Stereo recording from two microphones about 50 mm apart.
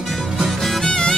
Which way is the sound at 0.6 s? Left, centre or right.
Centre.